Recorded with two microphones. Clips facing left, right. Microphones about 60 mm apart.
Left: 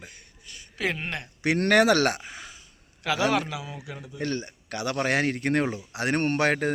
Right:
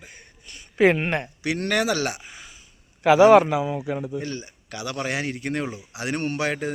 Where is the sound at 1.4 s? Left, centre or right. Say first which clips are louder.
Left 6 dB; left.